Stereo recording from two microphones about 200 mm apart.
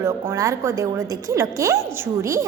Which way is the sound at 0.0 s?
15° right (ahead or behind).